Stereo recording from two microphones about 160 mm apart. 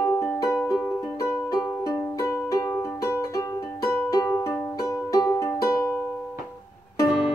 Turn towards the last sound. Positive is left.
turn(degrees=0)  # may be behind; listen again after turning